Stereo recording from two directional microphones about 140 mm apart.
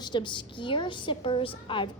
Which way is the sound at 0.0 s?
35° left (ahead or behind).